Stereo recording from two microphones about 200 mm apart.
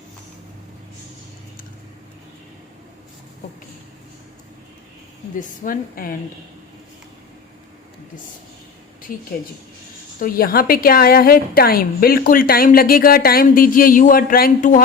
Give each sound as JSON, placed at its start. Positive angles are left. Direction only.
{"t": 5.4, "sound": "a woman's voice", "side_deg": 45}
{"t": 10.2, "sound": "a woman's voice", "side_deg": 45}